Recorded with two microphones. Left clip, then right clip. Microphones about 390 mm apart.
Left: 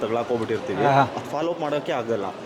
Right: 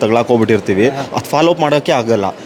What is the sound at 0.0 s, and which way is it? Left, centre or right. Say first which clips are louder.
Speech: right 12 dB; right.